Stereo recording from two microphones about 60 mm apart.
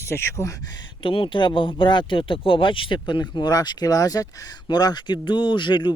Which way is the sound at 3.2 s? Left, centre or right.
Left.